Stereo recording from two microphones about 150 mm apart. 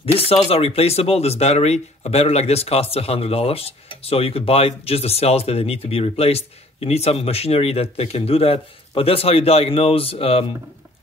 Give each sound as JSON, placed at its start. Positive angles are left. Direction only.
{"t": 0.0, "sound": "speech", "side_deg": 40}